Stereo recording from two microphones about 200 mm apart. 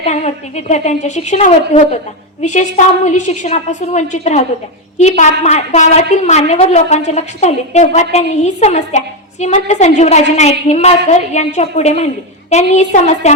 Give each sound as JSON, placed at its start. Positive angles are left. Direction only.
{"t": 0.0, "sound": "a woman's voice", "side_deg": 35}